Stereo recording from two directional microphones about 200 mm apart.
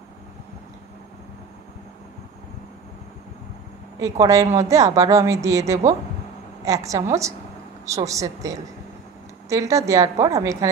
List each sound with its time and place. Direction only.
4.0 s a woman's voice: 15° right (ahead or behind)